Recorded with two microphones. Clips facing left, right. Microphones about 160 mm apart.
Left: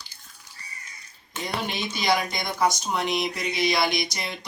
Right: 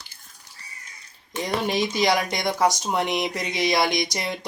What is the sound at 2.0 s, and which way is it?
Speech, 85° right.